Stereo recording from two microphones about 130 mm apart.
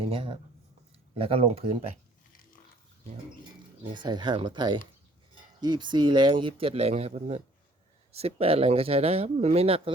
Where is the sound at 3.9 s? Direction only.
35° right (ahead or behind).